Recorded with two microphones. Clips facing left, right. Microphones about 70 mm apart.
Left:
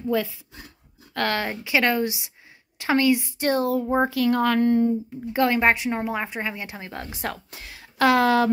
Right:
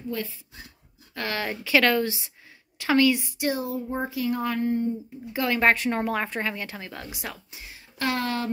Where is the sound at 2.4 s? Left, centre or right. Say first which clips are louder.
Left 1 dB; left.